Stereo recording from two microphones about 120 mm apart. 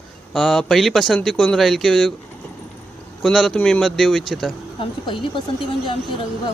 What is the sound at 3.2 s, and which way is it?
Speech, 5° left (ahead or behind).